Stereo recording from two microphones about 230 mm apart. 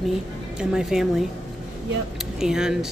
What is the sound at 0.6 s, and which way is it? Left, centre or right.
Speech, centre.